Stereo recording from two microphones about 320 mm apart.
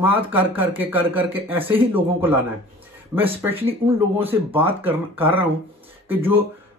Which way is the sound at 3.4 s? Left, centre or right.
Centre.